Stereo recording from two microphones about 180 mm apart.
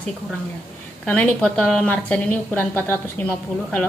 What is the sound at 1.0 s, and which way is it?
A woman's voice, 10° left (ahead or behind).